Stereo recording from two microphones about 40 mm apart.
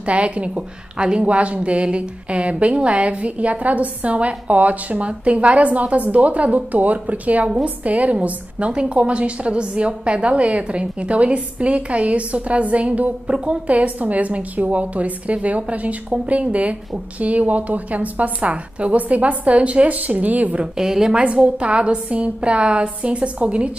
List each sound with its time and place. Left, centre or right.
0.0 s a woman's voice: right
20.7 s a woman's voice: centre
21.2 s a woman's voice: right